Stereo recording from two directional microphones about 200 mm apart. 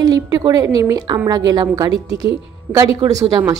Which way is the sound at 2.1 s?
60° right (ahead or behind).